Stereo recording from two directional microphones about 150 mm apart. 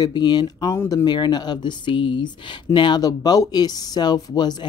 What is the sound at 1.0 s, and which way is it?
Speech, 30° left (ahead or behind).